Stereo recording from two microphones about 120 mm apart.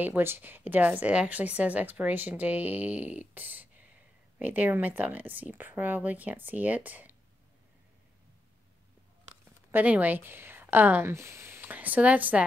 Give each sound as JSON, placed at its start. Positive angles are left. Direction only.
{"t": 0.0, "sound": "a woman's voice", "side_deg": -15}
{"t": 9.7, "sound": "speech", "side_deg": -15}